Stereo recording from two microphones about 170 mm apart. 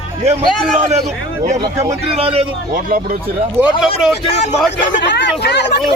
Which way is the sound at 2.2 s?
35° right (ahead or behind).